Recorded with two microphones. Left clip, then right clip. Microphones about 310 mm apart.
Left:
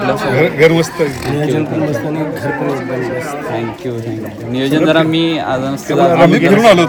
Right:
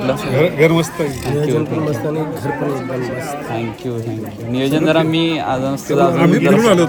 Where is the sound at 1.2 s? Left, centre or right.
Centre.